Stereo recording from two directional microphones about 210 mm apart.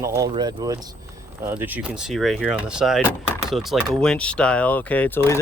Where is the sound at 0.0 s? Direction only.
15° right (ahead or behind).